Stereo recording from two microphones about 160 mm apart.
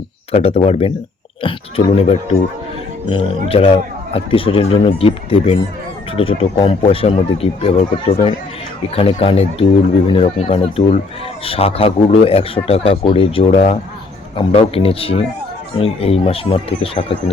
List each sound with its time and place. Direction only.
0.3 s a man's voice: 40° left (ahead or behind)
3.5 s a man's voice: 35° left (ahead or behind)